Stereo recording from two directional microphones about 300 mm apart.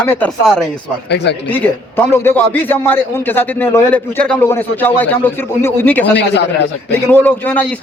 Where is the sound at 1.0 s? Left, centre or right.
Left.